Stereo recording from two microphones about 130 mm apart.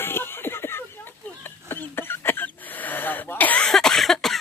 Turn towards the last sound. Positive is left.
turn(degrees=0)  # may be behind; listen again after turning